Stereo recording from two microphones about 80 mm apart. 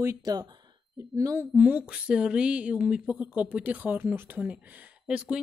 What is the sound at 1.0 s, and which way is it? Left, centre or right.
Speech, right.